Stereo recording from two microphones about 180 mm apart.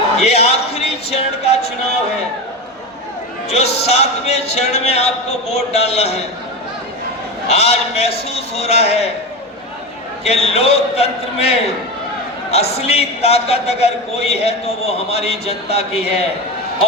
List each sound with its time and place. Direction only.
0.2 s a sound: 35° left (ahead or behind)
1.1 s music: 35° left (ahead or behind)
3.5 s a man's voice: 35° left (ahead or behind)
7.4 s a man's voice: 35° left (ahead or behind)
10.2 s a man's voice: 35° left (ahead or behind)